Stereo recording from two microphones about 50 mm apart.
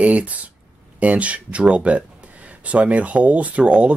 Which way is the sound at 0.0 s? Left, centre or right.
Right.